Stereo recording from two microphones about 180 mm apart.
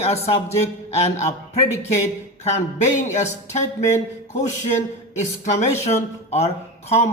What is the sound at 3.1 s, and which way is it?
Speech, 40° left (ahead or behind).